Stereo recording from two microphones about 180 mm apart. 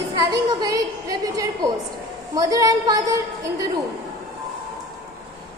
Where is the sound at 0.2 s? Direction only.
20° right (ahead or behind).